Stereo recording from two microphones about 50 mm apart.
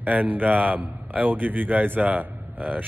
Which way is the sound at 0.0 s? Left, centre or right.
Right.